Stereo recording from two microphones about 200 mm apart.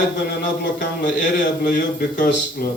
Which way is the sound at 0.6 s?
40° left (ahead or behind).